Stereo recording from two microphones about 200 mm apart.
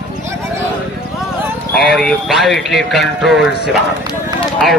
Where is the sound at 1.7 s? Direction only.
Centre (ahead or behind).